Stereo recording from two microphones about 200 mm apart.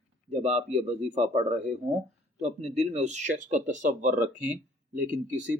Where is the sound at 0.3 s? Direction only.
35° right (ahead or behind).